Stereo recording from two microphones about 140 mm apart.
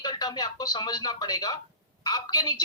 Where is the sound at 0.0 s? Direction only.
30° left (ahead or behind).